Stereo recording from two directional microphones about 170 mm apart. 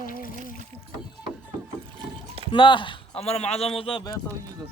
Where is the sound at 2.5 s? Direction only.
30° left (ahead or behind).